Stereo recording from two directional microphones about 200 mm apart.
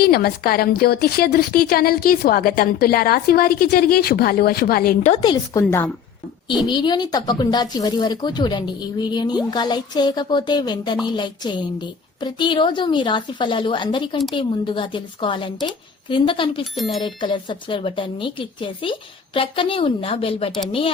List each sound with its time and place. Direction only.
0.0 s a woman's voice: 50° left (ahead or behind)
5.1 s speech: 25° left (ahead or behind)